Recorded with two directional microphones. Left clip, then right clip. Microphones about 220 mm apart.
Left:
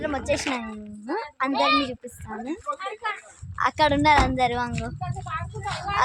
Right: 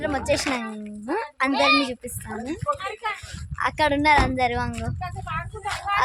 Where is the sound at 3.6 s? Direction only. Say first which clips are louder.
Left 1 dB; 15° left (ahead or behind).